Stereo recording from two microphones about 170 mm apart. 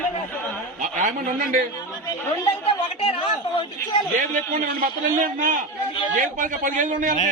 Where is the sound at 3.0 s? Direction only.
30° left (ahead or behind).